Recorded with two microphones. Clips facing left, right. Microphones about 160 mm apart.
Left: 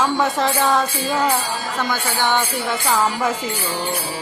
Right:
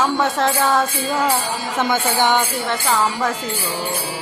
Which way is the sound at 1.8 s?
20° right (ahead or behind).